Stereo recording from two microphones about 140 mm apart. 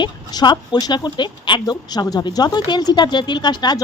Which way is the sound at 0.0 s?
30° left (ahead or behind).